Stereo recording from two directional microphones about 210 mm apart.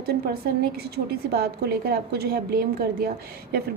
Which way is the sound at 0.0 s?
50° right (ahead or behind).